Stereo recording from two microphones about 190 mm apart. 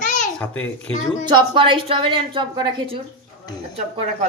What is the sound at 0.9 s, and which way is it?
Speech, 35° left (ahead or behind).